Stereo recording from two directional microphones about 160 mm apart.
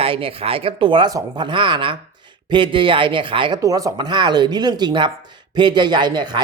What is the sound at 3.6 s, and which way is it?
Speech, 20° right (ahead or behind).